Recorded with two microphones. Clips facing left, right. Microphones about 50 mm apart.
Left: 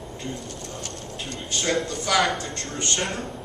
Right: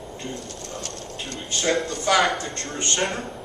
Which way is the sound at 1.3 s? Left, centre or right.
Centre.